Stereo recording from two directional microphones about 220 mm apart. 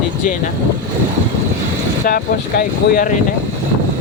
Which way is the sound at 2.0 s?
40° left (ahead or behind).